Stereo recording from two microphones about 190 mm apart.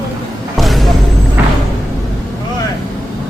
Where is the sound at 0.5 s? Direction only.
Centre (ahead or behind).